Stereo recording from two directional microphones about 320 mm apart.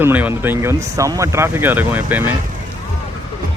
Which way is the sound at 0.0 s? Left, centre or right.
Centre.